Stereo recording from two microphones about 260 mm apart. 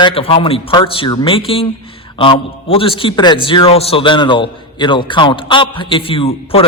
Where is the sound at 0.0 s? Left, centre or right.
Left.